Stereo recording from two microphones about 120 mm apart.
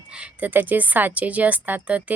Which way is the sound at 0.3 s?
15° right (ahead or behind).